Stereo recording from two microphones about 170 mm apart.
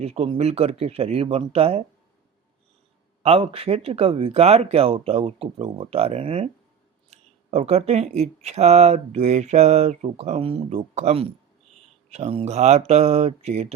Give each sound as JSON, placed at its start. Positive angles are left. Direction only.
{"t": 0.0, "sound": "speech", "side_deg": -35}
{"t": 3.2, "sound": "speech", "side_deg": -35}